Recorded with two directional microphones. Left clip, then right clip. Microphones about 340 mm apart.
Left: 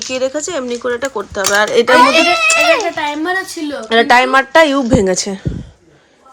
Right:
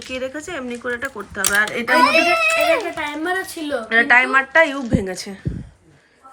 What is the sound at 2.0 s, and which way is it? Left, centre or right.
Speech, left.